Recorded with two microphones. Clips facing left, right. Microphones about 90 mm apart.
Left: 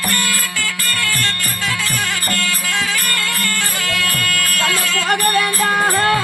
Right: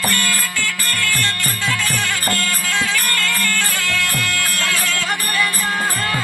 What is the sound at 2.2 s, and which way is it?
Music, 20° right (ahead or behind).